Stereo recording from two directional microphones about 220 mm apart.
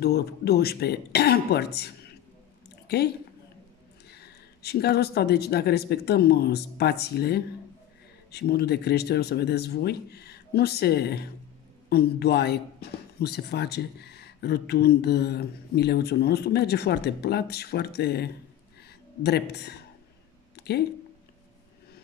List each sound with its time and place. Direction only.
0.0 s speech: 45° left (ahead or behind)
4.1 s speech: 45° left (ahead or behind)
20.5 s a sound: 50° left (ahead or behind)